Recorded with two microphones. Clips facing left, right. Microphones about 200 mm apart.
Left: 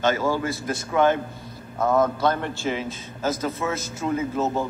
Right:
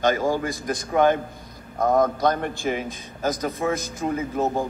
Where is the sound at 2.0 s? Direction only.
15° right (ahead or behind).